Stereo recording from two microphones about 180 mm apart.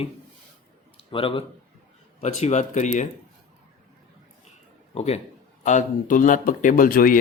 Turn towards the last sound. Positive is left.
turn(degrees=50)  # may be behind; listen again after turning